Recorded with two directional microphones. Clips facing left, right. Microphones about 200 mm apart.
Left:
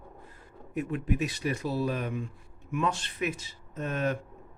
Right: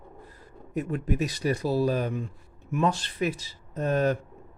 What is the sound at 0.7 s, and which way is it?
A man's voice, 40° right (ahead or behind).